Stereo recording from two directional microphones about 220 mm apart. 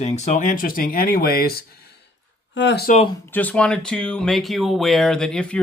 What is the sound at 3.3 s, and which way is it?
Speech, 5° left (ahead or behind).